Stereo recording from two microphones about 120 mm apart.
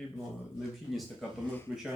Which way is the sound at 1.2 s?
5° left (ahead or behind).